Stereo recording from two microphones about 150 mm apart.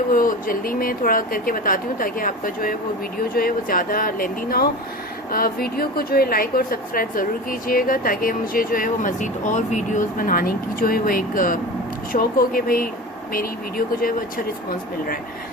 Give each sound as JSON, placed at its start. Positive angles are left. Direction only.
{"t": 0.1, "sound": "speech", "side_deg": 70}